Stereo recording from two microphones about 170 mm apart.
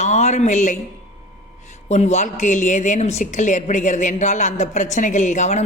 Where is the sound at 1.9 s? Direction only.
40° left (ahead or behind).